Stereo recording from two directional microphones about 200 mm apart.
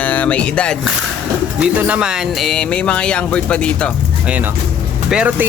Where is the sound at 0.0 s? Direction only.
5° left (ahead or behind).